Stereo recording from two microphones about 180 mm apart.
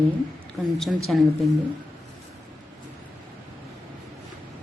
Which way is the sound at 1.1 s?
5° left (ahead or behind).